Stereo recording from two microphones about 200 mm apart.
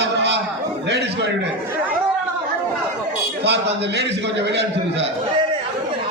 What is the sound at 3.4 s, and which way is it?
A man's voice, 60° right (ahead or behind).